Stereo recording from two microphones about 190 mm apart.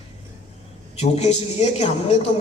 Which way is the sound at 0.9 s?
35° left (ahead or behind).